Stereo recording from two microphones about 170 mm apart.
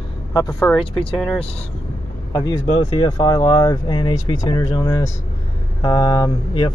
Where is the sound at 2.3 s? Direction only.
20° left (ahead or behind).